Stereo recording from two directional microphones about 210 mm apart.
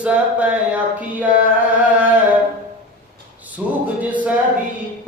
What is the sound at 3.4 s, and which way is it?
A capella, 5° right (ahead or behind).